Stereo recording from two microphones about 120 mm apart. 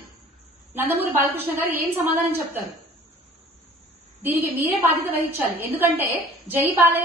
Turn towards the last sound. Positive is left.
turn(degrees=-15)  # may be behind; listen again after turning